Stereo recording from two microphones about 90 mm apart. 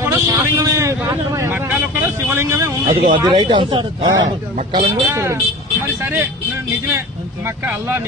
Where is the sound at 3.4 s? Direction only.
60° right (ahead or behind).